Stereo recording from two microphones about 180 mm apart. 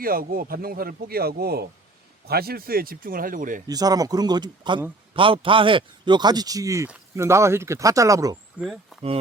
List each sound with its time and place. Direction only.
0.0 s speech: 55° right (ahead or behind)
3.7 s a man's voice: 20° right (ahead or behind)
8.5 s speech: centre (ahead or behind)